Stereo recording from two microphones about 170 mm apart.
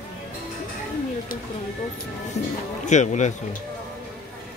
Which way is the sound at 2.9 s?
45° left (ahead or behind).